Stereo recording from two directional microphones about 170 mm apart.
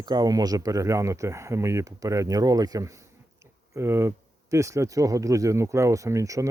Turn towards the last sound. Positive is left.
turn(degrees=-20)  # may be behind; listen again after turning